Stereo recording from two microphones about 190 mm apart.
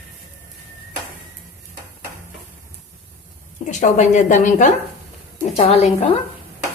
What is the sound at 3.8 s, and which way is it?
Speech, 40° left (ahead or behind).